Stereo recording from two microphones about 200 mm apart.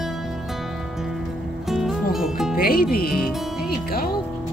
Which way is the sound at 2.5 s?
50° left (ahead or behind).